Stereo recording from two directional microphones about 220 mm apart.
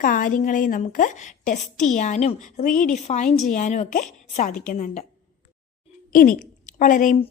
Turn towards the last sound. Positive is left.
turn(degrees=35)  # may be behind; listen again after turning